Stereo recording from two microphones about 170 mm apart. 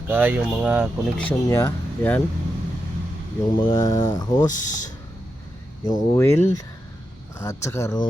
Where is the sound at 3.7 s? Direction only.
15° left (ahead or behind).